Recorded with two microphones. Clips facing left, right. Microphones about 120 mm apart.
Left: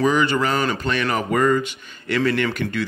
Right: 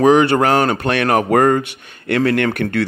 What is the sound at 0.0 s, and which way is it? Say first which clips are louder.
Speech: right 7 dB; 65° right (ahead or behind).